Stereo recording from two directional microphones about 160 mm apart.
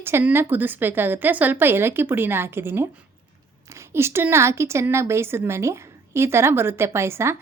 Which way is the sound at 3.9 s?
15° right (ahead or behind).